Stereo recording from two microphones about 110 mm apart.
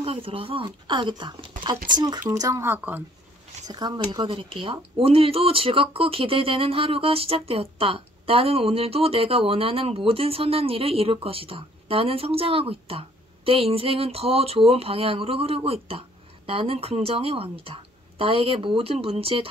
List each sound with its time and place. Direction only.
0.0 s speech: 55° right (ahead or behind); by 3.0 s 20° right (ahead or behind)
3.6 s speech: 40° right (ahead or behind); by 19.4 s 60° right (ahead or behind)